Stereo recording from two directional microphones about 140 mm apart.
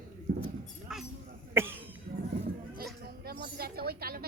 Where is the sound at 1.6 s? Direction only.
15° right (ahead or behind).